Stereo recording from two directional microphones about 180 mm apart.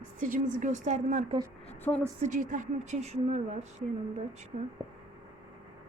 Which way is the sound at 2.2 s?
45° right (ahead or behind).